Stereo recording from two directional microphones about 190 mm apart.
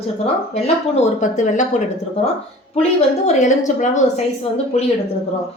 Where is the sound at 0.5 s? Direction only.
35° left (ahead or behind).